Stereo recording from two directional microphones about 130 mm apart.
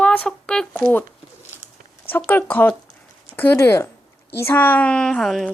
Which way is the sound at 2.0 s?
15° left (ahead or behind).